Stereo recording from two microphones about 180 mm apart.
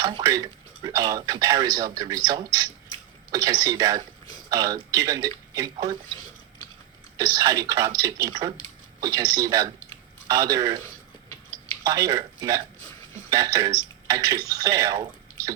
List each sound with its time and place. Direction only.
0.0 s speech: 20° right (ahead or behind)
7.2 s speech: 20° right (ahead or behind)
11.9 s speech: 20° right (ahead or behind)